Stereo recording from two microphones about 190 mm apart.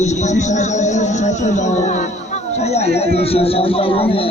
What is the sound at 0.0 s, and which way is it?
Speech, 35° left (ahead or behind).